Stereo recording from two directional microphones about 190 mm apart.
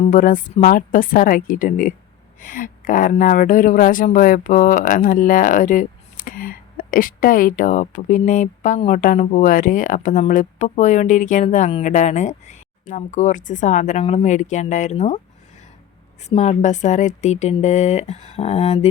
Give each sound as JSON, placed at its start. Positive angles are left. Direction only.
{"t": 0.0, "sound": "speech", "side_deg": 40}
{"t": 16.3, "sound": "speech", "side_deg": 35}